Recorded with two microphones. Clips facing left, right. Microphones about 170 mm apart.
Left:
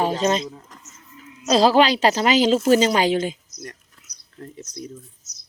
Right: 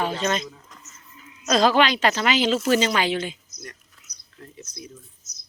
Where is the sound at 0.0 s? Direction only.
40° left (ahead or behind).